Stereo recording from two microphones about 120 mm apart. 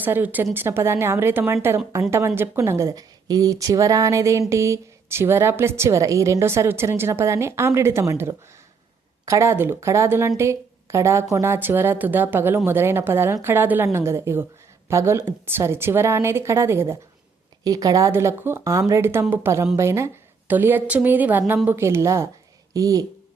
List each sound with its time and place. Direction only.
0.0 s a woman's voice: 15° right (ahead or behind)
17.6 s a woman's voice: 30° right (ahead or behind)